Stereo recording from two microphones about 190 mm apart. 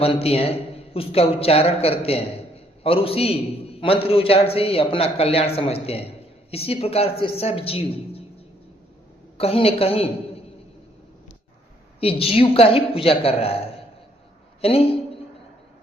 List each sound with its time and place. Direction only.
0.0 s a man's voice: 30° left (ahead or behind)
9.4 s a woman's voice: 30° left (ahead or behind)
11.9 s a man's voice: 30° left (ahead or behind)